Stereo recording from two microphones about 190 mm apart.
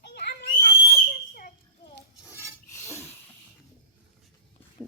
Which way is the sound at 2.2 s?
10° right (ahead or behind).